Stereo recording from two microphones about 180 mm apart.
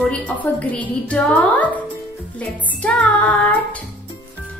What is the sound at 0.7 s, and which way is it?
Speech, 5° left (ahead or behind).